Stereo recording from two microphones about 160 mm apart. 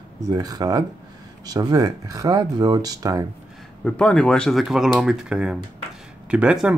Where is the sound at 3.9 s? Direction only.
5° left (ahead or behind).